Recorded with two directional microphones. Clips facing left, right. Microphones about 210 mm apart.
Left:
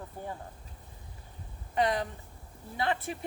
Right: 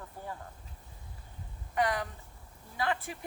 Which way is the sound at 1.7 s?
25° left (ahead or behind).